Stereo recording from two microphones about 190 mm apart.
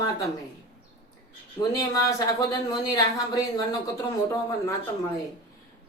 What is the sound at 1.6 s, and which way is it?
Speech, 20° left (ahead or behind).